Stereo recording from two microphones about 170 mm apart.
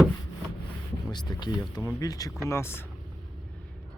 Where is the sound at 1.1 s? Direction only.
25° left (ahead or behind).